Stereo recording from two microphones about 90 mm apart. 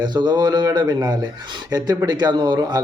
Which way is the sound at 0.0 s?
55° right (ahead or behind).